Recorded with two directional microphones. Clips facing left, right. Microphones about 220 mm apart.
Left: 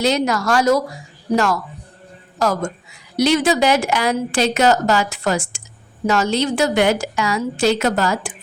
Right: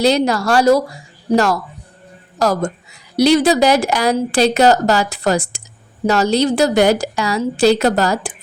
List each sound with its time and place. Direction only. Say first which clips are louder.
0.0 s a woman's voice: right 4 dB; 35° right (ahead or behind)